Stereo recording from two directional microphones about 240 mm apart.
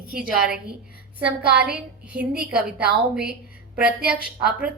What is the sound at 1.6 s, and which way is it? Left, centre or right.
A woman's voice, centre.